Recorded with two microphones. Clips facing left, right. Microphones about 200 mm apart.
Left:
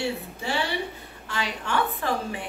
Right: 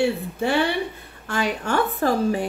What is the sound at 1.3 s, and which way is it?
A woman's voice, 50° right (ahead or behind).